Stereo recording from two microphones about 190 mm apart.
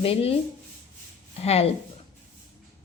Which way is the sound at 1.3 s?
35° left (ahead or behind).